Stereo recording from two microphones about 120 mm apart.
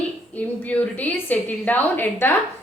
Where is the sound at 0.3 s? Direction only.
15° left (ahead or behind).